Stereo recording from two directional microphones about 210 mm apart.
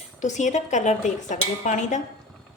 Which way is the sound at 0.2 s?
35° left (ahead or behind).